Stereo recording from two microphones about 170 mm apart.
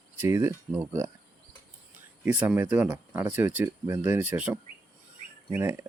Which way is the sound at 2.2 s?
10° right (ahead or behind).